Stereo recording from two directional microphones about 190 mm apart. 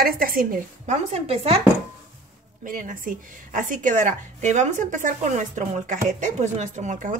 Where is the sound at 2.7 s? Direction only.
45° right (ahead or behind).